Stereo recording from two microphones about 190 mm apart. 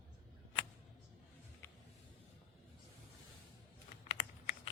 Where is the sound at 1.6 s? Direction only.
10° left (ahead or behind).